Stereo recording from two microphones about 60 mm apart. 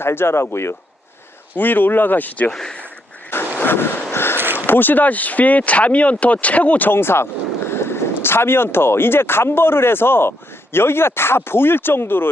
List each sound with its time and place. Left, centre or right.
0.0 s speech: left
1.5 s speech: left
2.5 s speech: centre
3.6 s a sound: left
4.4 s a sound: right
4.6 s speech: left